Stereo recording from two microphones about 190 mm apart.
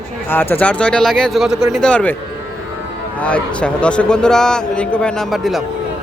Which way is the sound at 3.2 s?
5° left (ahead or behind).